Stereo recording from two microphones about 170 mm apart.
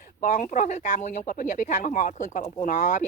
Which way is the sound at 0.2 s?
50° left (ahead or behind).